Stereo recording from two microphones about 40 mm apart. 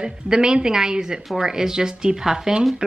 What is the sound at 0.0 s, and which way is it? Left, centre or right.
Speech, centre.